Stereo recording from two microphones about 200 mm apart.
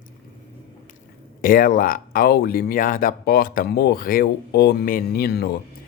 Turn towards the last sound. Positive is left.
turn(degrees=55)  # may be behind; listen again after turning